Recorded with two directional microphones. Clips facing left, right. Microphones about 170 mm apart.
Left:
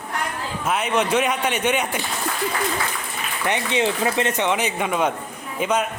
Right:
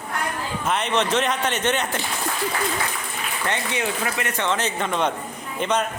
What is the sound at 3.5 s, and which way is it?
Speech, 20° left (ahead or behind).